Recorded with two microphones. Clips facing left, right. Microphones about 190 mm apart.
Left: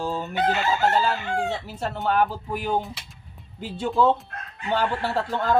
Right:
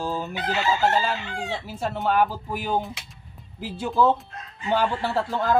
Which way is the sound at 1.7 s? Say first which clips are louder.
Right 1 dB; 5° right (ahead or behind).